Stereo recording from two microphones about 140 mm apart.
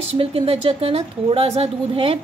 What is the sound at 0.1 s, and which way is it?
Speech, 45° right (ahead or behind).